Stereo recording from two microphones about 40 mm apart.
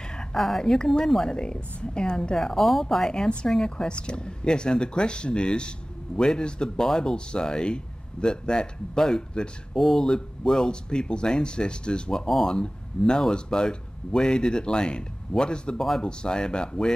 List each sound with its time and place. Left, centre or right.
0.1 s a sound: left
0.6 s a woman's voice: centre
3.1 s speech: centre